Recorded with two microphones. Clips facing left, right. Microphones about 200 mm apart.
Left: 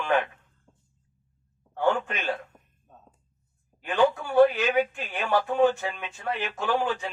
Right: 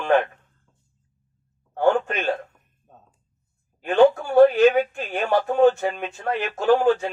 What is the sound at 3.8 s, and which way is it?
Speech, 50° right (ahead or behind).